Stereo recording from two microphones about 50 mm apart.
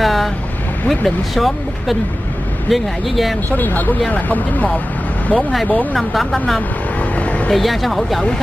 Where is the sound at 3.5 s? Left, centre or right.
Left.